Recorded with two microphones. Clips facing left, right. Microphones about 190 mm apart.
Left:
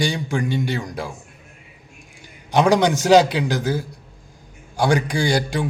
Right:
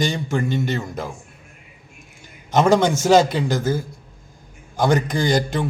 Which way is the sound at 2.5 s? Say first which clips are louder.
Even; 15° left (ahead or behind).